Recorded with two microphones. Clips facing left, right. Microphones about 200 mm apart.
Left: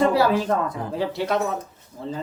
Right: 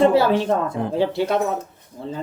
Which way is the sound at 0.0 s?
25° right (ahead or behind).